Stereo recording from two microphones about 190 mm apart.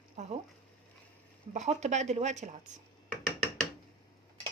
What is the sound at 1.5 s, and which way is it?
Speech, 35° right (ahead or behind).